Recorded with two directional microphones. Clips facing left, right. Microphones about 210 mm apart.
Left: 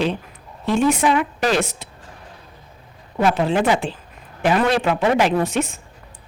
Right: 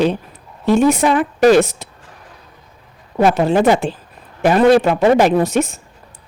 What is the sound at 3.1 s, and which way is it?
A woman's voice, 45° right (ahead or behind).